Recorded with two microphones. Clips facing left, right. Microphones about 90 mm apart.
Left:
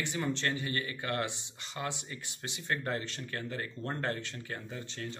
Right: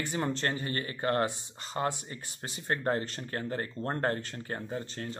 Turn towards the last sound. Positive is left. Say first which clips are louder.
# right 4 dB
turn(degrees=-40)  # may be behind; listen again after turning